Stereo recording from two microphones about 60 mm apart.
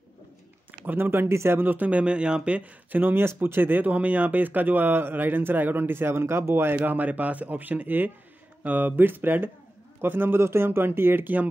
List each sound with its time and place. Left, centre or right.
0.7 s speech: right
3.3 s speech: right